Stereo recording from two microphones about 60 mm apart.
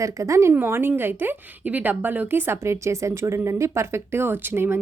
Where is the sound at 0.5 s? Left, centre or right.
Right.